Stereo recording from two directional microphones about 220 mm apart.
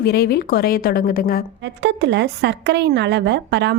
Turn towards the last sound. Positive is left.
turn(degrees=-50)  # may be behind; listen again after turning